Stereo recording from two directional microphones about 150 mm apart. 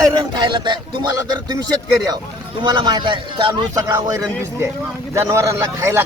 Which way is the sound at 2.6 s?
30° right (ahead or behind).